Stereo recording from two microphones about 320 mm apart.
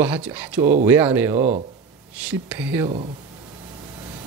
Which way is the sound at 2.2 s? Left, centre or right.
Centre.